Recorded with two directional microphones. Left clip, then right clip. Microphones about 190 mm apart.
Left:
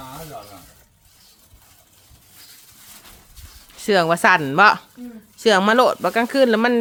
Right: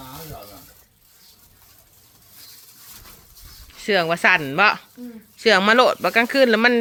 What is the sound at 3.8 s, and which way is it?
Speech, 30° left (ahead or behind).